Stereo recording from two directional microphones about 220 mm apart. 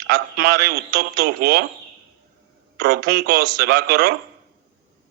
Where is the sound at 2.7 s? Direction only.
45° right (ahead or behind).